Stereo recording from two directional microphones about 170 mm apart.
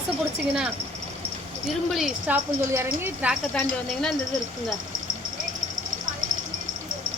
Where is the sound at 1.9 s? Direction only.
Centre (ahead or behind).